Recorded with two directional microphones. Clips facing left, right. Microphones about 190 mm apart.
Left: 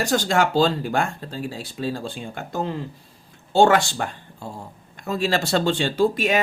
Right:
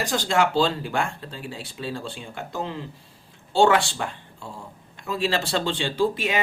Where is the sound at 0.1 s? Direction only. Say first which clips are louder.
Left 1 dB; 45° left (ahead or behind).